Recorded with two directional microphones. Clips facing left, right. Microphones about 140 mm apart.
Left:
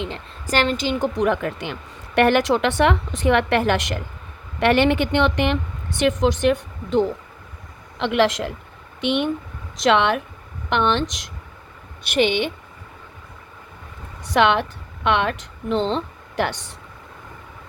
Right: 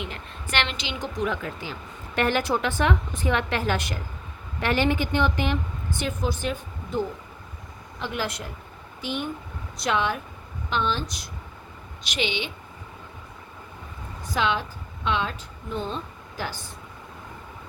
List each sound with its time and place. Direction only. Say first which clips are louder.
0.5 s a woman's voice: left 9 dB; 40° left (ahead or behind); by 5.5 s 70° left (ahead or behind)
6.0 s speech: left 11 dB; 85° left
10.7 s a woman's voice: left 7 dB; 70° left (ahead or behind); by 11.3 s 90° left
12.0 s a woman's voice: left 9 dB; 55° left (ahead or behind)
14.3 s speech: left 8 dB; 70° left (ahead or behind)